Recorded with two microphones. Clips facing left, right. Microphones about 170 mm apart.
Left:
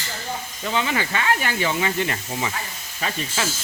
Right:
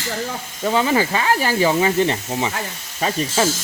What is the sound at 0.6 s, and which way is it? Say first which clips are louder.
Speech: right 7 dB; 35° right (ahead or behind).